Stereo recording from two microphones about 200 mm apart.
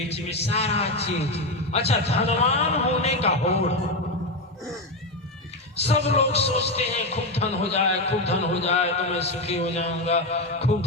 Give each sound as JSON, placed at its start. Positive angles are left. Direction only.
{"t": 0.1, "sound": "a man's voice", "side_deg": 30}
{"t": 5.7, "sound": "a man's voice", "side_deg": 30}